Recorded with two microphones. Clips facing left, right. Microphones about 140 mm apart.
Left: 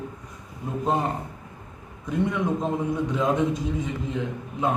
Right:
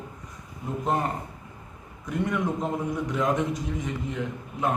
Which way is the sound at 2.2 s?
20° left (ahead or behind).